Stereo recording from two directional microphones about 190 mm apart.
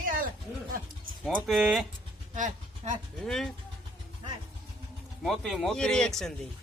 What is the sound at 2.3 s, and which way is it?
Speech, 40° right (ahead or behind).